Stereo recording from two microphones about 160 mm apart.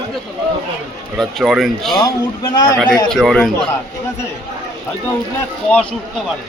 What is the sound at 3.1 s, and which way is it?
Speech, centre (ahead or behind).